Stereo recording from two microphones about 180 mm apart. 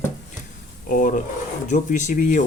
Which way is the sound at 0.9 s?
45° left (ahead or behind).